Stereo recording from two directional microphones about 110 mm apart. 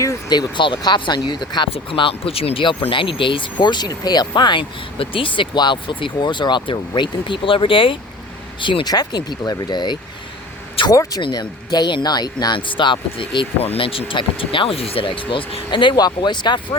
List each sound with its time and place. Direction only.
0.3 s speech: 45° left (ahead or behind)
1.7 s speech: 55° left (ahead or behind)
10.8 s speech: 55° left (ahead or behind)
11.2 s speech: 40° left (ahead or behind)